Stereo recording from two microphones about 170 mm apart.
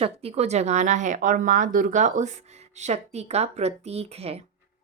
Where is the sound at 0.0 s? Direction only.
35° right (ahead or behind).